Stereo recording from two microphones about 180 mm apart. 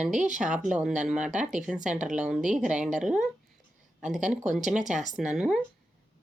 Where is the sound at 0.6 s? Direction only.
5° right (ahead or behind).